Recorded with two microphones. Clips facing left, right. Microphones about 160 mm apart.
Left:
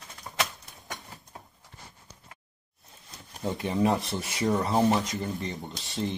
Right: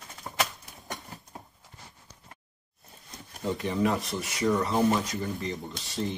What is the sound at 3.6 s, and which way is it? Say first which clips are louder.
Speech: left 2 dB; 30° left (ahead or behind).